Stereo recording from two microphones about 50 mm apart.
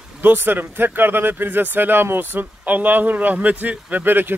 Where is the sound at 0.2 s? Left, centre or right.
Right.